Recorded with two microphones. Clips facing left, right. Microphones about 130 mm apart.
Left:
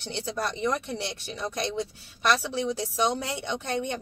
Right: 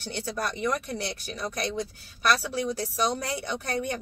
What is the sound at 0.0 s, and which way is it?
Speech, 25° left (ahead or behind).